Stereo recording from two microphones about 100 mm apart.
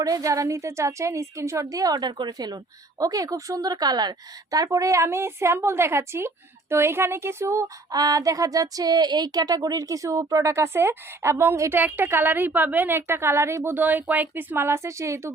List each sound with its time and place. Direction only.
0.0 s a woman's voice: 35° right (ahead or behind)
11.7 s a woman's voice: 20° right (ahead or behind)